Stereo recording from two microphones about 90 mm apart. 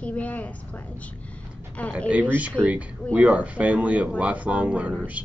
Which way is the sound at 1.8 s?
15° left (ahead or behind).